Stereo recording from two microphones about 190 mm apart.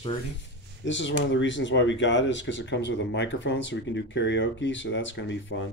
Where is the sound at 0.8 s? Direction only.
75° left (ahead or behind).